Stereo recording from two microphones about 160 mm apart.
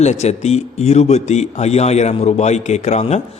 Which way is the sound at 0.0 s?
45° left (ahead or behind).